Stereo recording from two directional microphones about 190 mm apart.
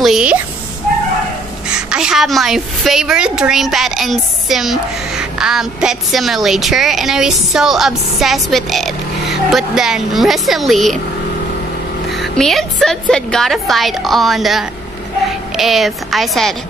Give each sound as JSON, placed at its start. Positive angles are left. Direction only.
{"t": 0.0, "sound": "speech", "side_deg": -5}
{"t": 1.9, "sound": "a woman's voice", "side_deg": -5}
{"t": 12.1, "sound": "a woman's voice", "side_deg": 0}